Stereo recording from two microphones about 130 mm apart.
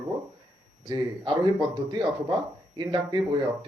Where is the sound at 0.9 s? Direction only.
35° right (ahead or behind).